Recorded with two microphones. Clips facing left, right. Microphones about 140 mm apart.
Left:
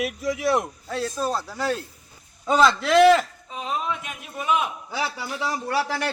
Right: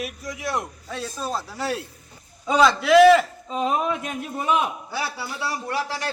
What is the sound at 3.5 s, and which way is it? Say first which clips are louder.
Speech: right 5 dB; 55° right (ahead or behind).